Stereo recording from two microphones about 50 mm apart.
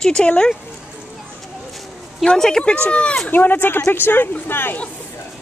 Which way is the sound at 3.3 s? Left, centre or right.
Left.